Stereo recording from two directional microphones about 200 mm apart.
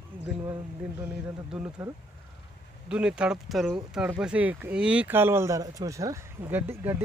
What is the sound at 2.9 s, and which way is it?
Speech, 5° right (ahead or behind).